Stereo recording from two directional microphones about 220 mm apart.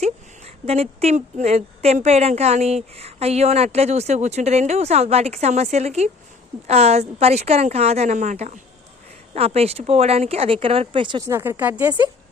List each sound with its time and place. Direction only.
0.0 s a woman's voice: 30° right (ahead or behind)